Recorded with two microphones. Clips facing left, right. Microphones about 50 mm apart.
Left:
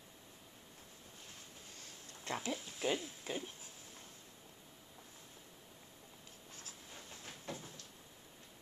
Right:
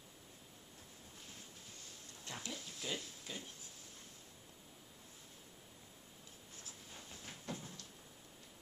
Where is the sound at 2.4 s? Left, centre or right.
Left.